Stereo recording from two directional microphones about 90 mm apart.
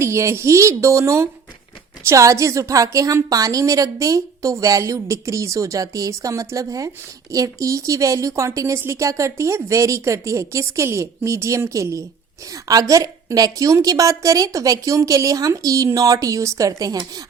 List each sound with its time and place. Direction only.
0.0 s a woman's voice: 30° right (ahead or behind)